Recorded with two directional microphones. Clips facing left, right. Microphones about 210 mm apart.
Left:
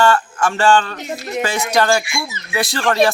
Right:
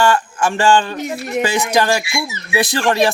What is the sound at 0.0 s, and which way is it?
Speech, 15° right (ahead or behind).